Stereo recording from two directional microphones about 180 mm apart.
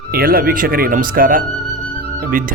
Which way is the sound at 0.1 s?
55° right (ahead or behind).